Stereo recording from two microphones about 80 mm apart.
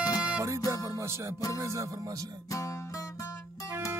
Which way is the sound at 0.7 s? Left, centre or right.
Right.